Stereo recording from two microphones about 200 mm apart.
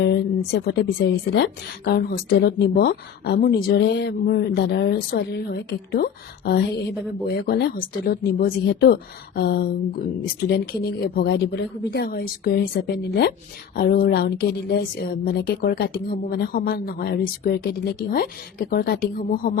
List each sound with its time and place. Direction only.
0.0 s speech: 55° left (ahead or behind)